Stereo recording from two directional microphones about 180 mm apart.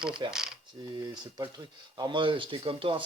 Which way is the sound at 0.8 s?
25° right (ahead or behind).